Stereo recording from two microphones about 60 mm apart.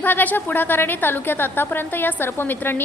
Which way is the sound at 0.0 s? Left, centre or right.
Left.